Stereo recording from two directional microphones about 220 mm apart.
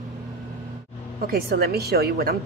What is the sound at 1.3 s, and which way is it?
A woman's voice, 45° right (ahead or behind).